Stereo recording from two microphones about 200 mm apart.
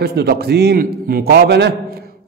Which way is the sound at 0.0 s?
50° right (ahead or behind).